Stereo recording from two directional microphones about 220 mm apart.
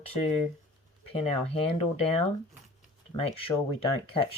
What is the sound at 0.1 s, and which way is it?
Speech, 30° left (ahead or behind).